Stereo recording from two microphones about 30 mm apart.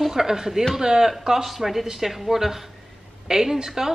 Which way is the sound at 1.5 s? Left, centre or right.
Centre.